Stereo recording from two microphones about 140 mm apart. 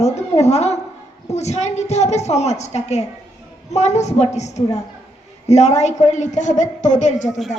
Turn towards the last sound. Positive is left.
turn(degrees=0)  # may be behind; listen again after turning